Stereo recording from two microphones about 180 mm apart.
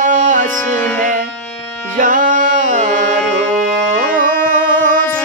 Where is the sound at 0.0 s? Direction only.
45° right (ahead or behind).